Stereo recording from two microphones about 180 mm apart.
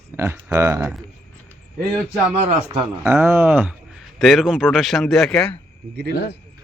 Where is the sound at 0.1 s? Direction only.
15° right (ahead or behind).